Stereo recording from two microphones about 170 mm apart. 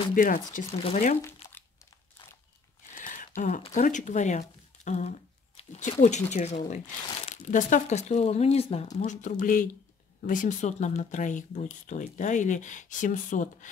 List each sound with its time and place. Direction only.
0.1 s speech: 50° left (ahead or behind)
0.7 s speech: 40° left (ahead or behind)
2.9 s a sound: 50° left (ahead or behind)
3.7 s speech: 45° left (ahead or behind)